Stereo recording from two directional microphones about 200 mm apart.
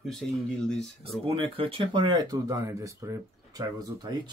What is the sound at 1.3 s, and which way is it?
Speech, 25° right (ahead or behind).